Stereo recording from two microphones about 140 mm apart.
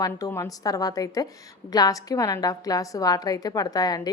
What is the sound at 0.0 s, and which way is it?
A woman's voice, 20° left (ahead or behind).